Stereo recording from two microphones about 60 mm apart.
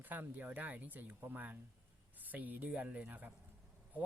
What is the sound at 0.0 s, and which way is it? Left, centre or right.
Speech, right.